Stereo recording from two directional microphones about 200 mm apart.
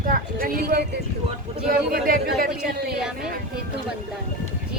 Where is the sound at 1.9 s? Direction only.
45° right (ahead or behind).